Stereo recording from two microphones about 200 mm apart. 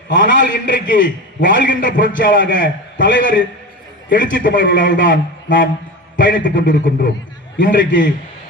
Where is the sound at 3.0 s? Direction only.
65° left (ahead or behind).